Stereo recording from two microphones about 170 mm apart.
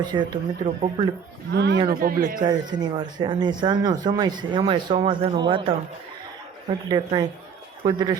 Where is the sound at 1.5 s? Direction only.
90° right.